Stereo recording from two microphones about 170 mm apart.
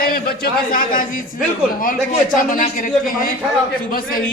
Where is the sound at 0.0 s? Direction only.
60° left (ahead or behind).